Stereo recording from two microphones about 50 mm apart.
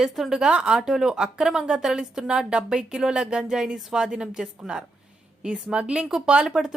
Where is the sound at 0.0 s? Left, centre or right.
Centre.